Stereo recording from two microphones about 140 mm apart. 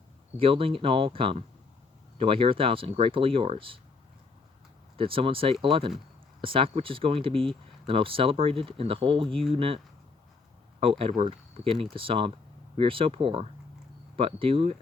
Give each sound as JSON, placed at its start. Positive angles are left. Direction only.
{"t": 0.3, "sound": "speech", "side_deg": -40}
{"t": 4.9, "sound": "speech", "side_deg": -40}